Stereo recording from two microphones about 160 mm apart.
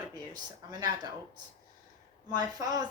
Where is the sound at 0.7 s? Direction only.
25° right (ahead or behind).